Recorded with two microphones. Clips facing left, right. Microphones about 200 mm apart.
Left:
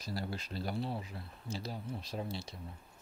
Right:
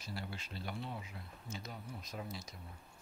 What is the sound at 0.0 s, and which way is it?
Speech, 40° left (ahead or behind).